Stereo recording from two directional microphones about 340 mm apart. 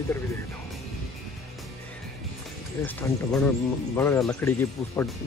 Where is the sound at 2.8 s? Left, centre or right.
Centre.